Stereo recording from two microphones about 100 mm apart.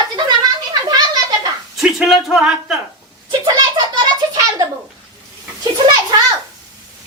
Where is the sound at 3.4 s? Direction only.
40° right (ahead or behind).